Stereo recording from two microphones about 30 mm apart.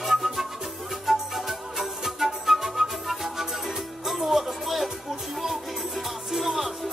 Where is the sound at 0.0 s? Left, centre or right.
Centre.